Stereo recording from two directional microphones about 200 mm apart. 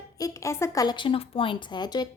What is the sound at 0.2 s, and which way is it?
Speech, 15° left (ahead or behind).